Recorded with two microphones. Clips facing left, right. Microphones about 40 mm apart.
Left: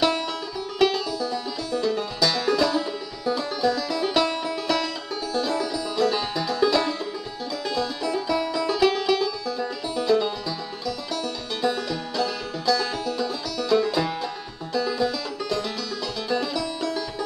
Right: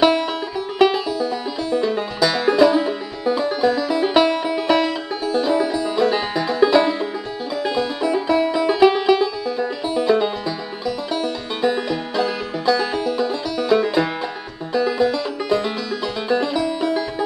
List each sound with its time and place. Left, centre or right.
0.0 s music: right